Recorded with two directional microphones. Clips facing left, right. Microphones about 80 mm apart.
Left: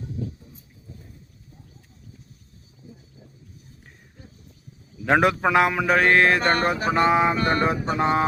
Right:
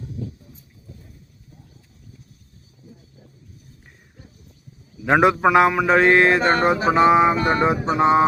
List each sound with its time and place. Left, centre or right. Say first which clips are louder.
5.0 s mantra: right 3 dB; centre